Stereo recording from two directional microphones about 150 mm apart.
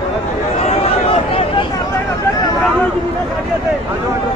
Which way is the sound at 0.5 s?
45° left (ahead or behind).